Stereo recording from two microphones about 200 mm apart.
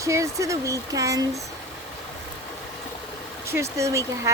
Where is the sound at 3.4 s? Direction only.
15° right (ahead or behind).